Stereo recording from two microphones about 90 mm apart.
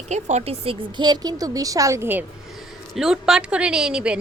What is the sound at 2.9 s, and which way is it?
A woman's voice, 5° right (ahead or behind).